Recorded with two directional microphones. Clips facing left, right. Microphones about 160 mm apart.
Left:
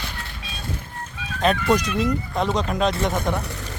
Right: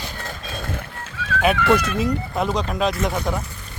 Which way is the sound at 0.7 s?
80° right.